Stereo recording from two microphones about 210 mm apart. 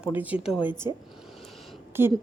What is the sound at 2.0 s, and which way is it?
Speech, 10° right (ahead or behind).